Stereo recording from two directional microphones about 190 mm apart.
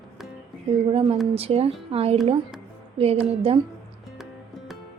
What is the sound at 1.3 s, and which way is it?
A woman's voice, 30° right (ahead or behind).